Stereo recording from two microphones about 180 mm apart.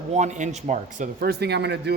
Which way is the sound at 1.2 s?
65° right (ahead or behind).